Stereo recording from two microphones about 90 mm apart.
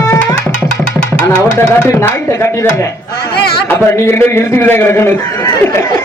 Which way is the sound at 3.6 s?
25° left (ahead or behind).